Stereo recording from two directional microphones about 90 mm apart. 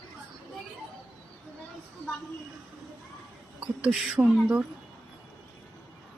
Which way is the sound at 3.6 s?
15° right (ahead or behind).